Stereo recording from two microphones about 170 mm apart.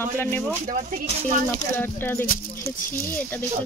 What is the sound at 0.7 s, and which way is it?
Speech, 50° right (ahead or behind).